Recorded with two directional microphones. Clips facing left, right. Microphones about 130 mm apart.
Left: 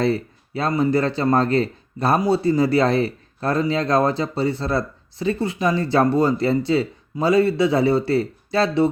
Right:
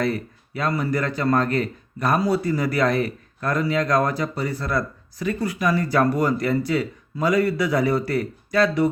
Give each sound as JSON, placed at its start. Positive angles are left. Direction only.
{"t": 0.0, "sound": "speech", "side_deg": 30}